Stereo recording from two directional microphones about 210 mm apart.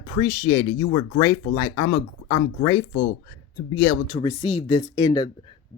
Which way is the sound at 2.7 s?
70° left (ahead or behind).